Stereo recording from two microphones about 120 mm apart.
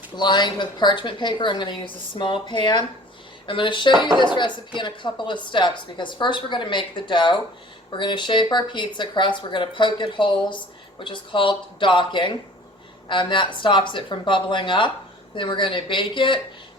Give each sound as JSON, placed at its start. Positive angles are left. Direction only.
{"t": 0.2, "sound": "a woman's voice", "side_deg": 40}